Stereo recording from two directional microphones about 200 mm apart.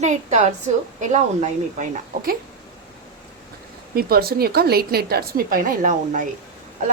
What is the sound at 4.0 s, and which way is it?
A woman's voice, 50° right (ahead or behind).